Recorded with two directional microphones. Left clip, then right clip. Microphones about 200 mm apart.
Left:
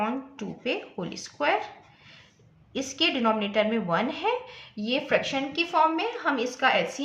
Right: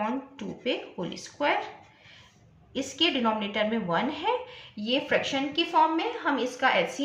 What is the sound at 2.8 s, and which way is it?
A woman's voice, 45° left (ahead or behind).